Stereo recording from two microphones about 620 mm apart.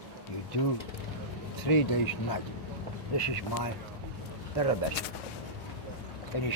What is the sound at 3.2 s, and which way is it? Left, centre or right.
Speech, left.